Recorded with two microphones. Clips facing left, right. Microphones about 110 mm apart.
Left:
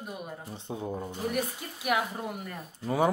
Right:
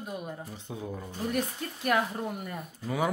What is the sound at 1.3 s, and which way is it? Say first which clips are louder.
Speech: right 1 dB; 10° left (ahead or behind).